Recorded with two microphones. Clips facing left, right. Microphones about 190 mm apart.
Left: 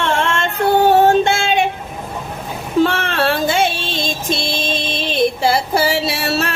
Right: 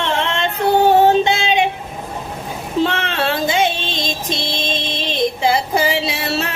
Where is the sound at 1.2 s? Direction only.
50° left (ahead or behind).